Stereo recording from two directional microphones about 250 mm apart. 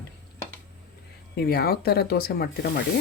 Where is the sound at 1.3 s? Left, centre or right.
Left.